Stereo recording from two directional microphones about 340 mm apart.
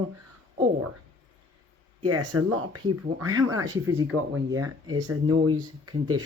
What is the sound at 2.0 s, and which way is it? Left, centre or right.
Speech, right.